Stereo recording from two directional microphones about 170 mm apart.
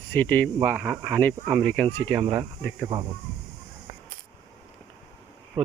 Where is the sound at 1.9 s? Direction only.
15° left (ahead or behind).